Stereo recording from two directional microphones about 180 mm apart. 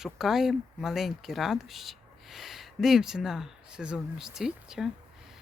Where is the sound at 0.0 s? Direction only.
Centre (ahead or behind).